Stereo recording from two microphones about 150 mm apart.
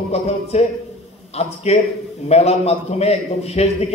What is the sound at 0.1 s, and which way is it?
A man's voice, 45° left (ahead or behind).